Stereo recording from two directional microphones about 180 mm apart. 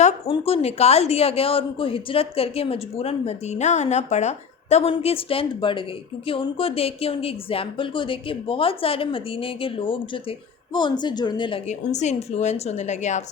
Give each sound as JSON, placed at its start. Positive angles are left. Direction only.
{"t": 0.3, "sound": "a woman's voice", "side_deg": 35}
{"t": 11.7, "sound": "a woman's voice", "side_deg": 40}